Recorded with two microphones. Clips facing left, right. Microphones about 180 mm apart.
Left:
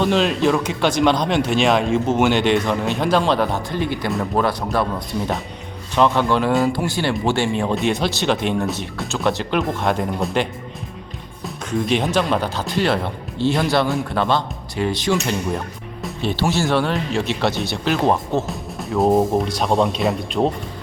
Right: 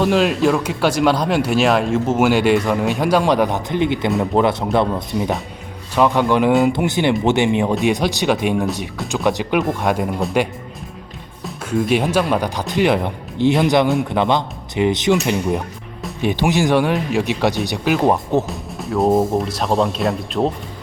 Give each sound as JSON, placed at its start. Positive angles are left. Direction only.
{"t": 0.0, "sound": "speech", "side_deg": -5}
{"t": 5.9, "sound": "speech", "side_deg": -10}
{"t": 18.4, "sound": "speech", "side_deg": 0}